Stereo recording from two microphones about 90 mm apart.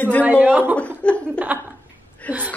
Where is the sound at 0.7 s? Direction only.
15° left (ahead or behind).